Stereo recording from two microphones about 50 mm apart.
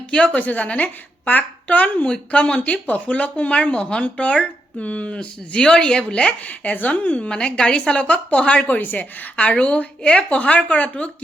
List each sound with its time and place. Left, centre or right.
0.3 s speech: left
2.6 s speech: left
6.7 s speech: left